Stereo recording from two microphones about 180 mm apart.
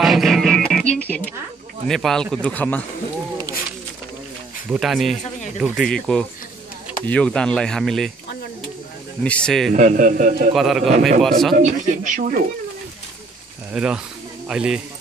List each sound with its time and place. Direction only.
0.0 s music: centre (ahead or behind)
1.0 s speech: 10° left (ahead or behind)
4.6 s speech: centre (ahead or behind)
9.2 s speech: 5° left (ahead or behind)
9.8 s speech: 45° right (ahead or behind)
10.5 s speech: centre (ahead or behind)
11.5 s speech: 45° right (ahead or behind)
13.7 s speech: 5° right (ahead or behind)